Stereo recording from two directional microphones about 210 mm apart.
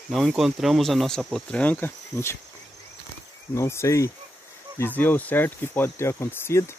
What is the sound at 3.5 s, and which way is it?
Speech, 15° left (ahead or behind).